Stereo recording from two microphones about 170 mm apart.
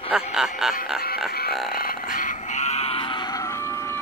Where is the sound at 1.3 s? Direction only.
65° left (ahead or behind).